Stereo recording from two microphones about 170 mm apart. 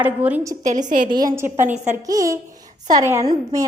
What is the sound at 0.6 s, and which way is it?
Speech, 45° right (ahead or behind).